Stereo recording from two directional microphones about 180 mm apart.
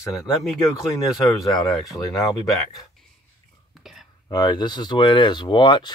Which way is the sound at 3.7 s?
Centre (ahead or behind).